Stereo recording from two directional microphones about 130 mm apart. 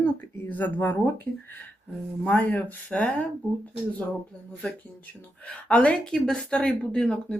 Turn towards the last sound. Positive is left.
turn(degrees=5)  # may be behind; listen again after turning